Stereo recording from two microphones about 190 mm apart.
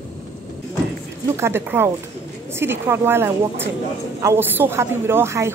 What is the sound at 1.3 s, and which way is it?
A woman's voice, 15° right (ahead or behind).